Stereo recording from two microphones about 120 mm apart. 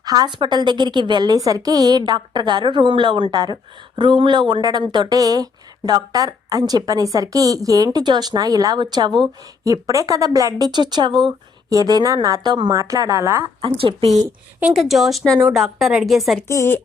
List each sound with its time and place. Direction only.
0.0 s a woman's voice: 30° right (ahead or behind)
13.6 s a woman's voice: 50° right (ahead or behind)
14.7 s a woman's voice: centre (ahead or behind)
16.5 s a woman's voice: 20° left (ahead or behind)